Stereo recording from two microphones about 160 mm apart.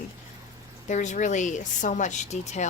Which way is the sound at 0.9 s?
50° left (ahead or behind).